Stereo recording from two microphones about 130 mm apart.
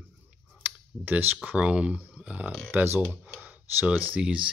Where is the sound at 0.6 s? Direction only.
15° right (ahead or behind).